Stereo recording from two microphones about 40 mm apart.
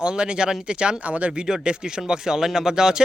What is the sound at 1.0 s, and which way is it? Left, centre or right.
Speech, right.